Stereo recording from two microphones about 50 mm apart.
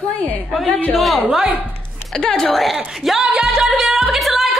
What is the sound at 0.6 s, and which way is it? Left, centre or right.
Speech, left.